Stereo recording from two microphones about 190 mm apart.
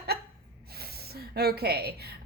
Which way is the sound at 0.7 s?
55° right (ahead or behind).